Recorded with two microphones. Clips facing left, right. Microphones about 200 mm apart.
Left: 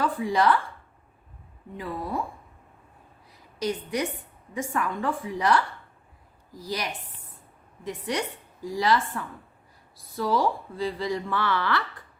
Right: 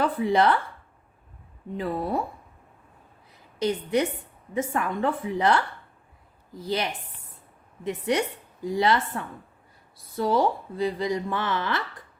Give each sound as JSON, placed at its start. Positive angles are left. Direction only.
{"t": 0.2, "sound": "speech", "side_deg": -25}
{"t": 1.8, "sound": "speech", "side_deg": -25}
{"t": 3.6, "sound": "speech", "side_deg": -25}